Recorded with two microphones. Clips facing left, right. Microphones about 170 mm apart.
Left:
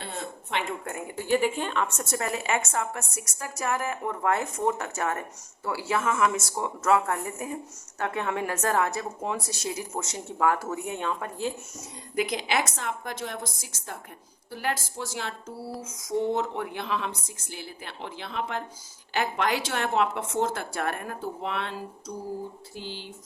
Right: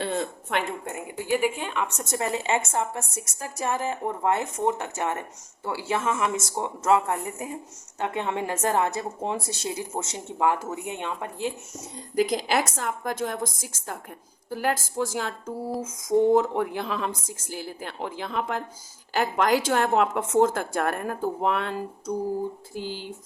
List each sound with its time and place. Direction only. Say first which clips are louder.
1.1 s speech: even; 10° right (ahead or behind)
12.1 s a woman's voice: right 4 dB; 40° right (ahead or behind)
17.1 s speech: right 4 dB; 90° right
17.5 s a woman's voice: right 5 dB; 45° right (ahead or behind)